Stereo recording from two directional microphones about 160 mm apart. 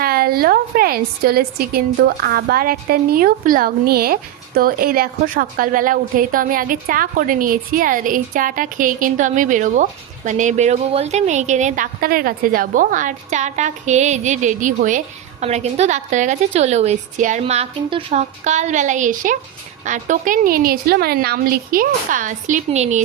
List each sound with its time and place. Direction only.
0.0 s a woman's voice: 70° right (ahead or behind); by 11.9 s 45° right (ahead or behind)
11.9 s a woman's voice: 65° right (ahead or behind); by 17.4 s 50° right (ahead or behind)
17.4 s a woman's voice: 35° right (ahead or behind)